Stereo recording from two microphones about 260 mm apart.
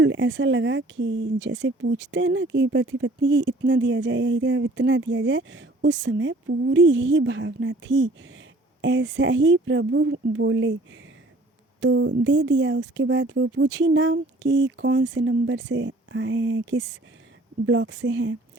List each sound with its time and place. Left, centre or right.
0.0 s speech: right
11.8 s speech: right